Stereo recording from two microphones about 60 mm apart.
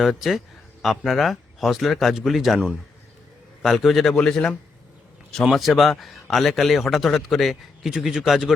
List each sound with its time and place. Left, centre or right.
0.0 s a man's voice: centre
5.4 s a man's voice: centre